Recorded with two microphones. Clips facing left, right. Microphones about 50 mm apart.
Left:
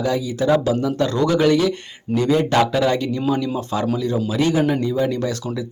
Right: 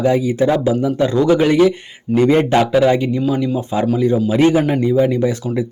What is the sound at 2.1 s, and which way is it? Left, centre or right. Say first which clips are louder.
Speech: right 5 dB; right.